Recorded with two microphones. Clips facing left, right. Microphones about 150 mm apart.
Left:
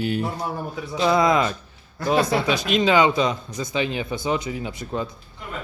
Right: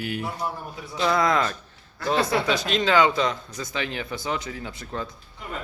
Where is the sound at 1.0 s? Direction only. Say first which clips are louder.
Left 3 dB; 20° left (ahead or behind).